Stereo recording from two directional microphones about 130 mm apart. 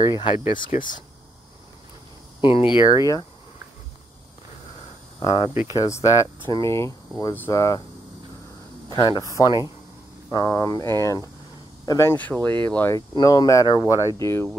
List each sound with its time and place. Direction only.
0.0 s speech: 35° left (ahead or behind)
0.6 s speech: 90° left
2.4 s speech: 40° left (ahead or behind)
5.2 s speech: 40° left (ahead or behind)
5.7 s speech: 25° left (ahead or behind)
8.9 s speech: 30° left (ahead or behind); by 12.9 s 15° left (ahead or behind)
12.9 s speech: 25° left (ahead or behind)